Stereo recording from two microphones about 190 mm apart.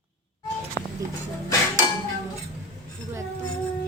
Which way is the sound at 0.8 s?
20° left (ahead or behind).